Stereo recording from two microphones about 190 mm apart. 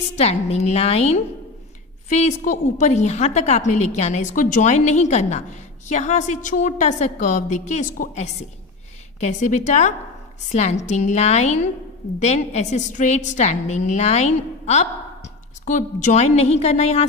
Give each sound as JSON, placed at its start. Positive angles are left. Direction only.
{"t": 0.1, "sound": "a woman's voice", "side_deg": 35}